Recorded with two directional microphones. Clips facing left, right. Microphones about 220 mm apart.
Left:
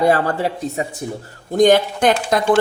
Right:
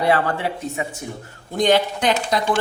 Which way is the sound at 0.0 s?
40° left (ahead or behind).